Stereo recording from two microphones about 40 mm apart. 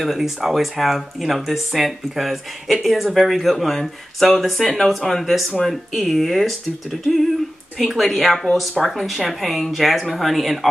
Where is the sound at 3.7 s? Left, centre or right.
Centre.